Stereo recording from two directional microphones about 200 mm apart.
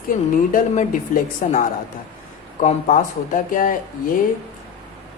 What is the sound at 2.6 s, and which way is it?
Speech, 35° left (ahead or behind).